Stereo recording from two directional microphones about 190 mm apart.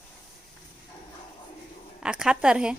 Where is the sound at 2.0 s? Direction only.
5° right (ahead or behind).